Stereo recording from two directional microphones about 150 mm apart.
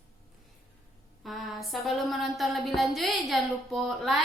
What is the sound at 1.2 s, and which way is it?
Speech, centre (ahead or behind).